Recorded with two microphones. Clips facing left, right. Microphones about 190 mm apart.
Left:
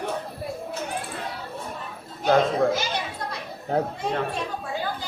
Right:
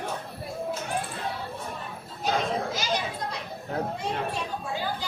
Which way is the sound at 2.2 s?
60° left (ahead or behind).